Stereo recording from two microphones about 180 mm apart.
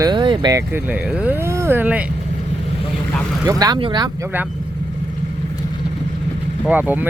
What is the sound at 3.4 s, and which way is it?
Speech, 20° right (ahead or behind).